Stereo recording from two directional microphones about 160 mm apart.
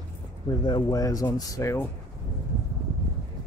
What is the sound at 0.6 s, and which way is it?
Speech, 25° left (ahead or behind).